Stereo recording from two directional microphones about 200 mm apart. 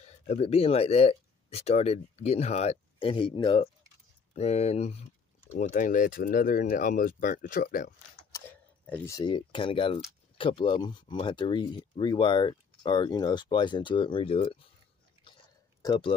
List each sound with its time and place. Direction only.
0.3 s speech: 30° left (ahead or behind); by 7.9 s 45° left (ahead or behind)
8.3 s speech: 10° left (ahead or behind); by 14.6 s 30° left (ahead or behind)
15.8 s speech: 20° left (ahead or behind)